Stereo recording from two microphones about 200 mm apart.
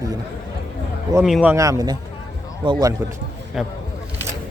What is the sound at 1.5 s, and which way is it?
Speech, 15° right (ahead or behind).